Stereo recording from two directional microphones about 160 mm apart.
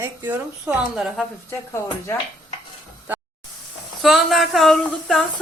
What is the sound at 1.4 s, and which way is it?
Speech, 20° left (ahead or behind).